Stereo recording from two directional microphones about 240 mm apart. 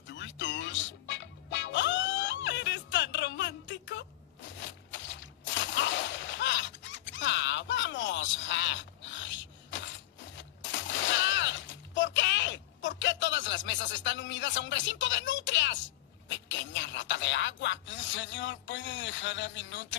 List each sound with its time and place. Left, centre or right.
0.1 s music: left
4.6 s splash: left
10.3 s a sound: left